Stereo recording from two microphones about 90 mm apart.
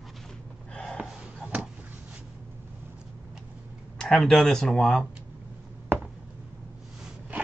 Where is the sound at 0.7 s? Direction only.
10° left (ahead or behind).